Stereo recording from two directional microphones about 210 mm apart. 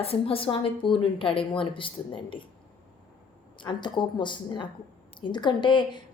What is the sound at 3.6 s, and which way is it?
A woman's voice, 20° left (ahead or behind).